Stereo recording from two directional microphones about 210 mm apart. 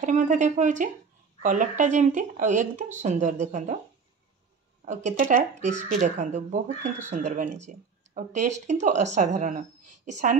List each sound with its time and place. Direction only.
0.0 s speech: 35° right (ahead or behind)
4.8 s speech: 35° right (ahead or behind)